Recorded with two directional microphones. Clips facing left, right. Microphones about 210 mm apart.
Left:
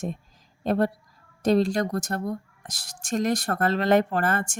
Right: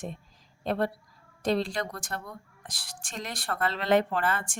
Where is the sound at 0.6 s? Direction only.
45° left (ahead or behind).